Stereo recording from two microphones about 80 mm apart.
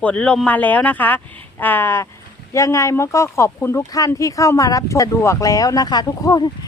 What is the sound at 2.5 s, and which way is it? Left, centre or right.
Speech, left.